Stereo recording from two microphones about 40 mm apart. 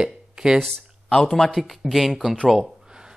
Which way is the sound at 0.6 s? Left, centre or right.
Centre.